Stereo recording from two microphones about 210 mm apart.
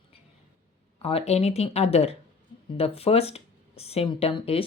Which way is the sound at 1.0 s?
30° left (ahead or behind).